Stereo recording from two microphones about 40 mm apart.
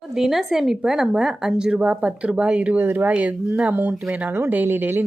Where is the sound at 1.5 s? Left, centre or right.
Right.